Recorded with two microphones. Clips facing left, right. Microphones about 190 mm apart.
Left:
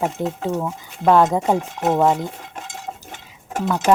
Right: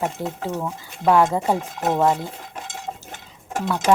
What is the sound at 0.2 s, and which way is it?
Speech, 20° left (ahead or behind).